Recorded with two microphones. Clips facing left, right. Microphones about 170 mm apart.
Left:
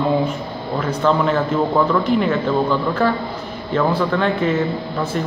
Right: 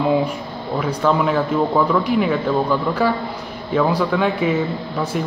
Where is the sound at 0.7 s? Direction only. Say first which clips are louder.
Even; 10° right (ahead or behind).